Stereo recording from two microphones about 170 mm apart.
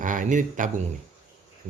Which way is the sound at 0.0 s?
50° right (ahead or behind).